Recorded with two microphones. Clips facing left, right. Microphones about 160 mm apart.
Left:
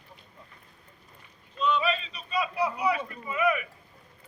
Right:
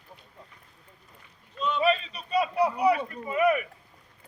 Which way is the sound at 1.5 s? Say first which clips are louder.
Right 2 dB; 45° right (ahead or behind).